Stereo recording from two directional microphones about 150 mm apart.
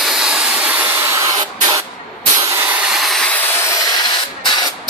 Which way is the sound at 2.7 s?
5° right (ahead or behind).